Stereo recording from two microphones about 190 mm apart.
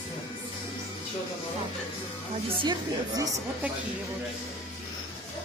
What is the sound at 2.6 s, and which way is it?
Speech, 20° right (ahead or behind).